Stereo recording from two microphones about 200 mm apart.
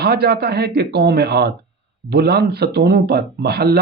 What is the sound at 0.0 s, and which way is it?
Speech, 50° right (ahead or behind).